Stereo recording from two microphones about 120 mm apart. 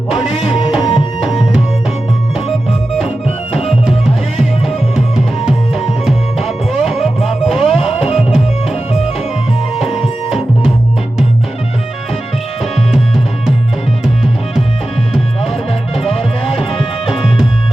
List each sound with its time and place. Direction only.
0.2 s music: 45° left (ahead or behind)
0.8 s tabla: 40° left (ahead or behind)
1.2 s tabla: 5° right (ahead or behind)
4.4 s music: 5° right (ahead or behind)
7.9 s music: 60° left (ahead or behind)
8.2 s music: 5° right (ahead or behind)
10.2 s music: centre (ahead or behind)
16.4 s music: 50° left (ahead or behind)